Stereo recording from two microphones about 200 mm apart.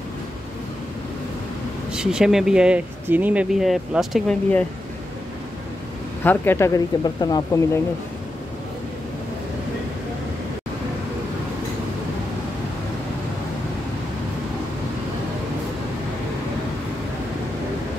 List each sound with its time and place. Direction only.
1.9 s speech: 5° right (ahead or behind)
6.2 s speech: 10° left (ahead or behind)